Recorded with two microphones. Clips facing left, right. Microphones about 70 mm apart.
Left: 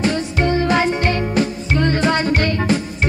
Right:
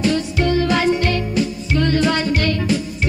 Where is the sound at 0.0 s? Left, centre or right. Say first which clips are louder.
Even; left.